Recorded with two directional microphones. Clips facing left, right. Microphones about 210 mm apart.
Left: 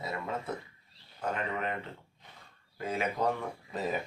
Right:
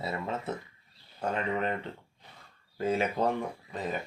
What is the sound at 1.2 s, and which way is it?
Speech, 30° right (ahead or behind).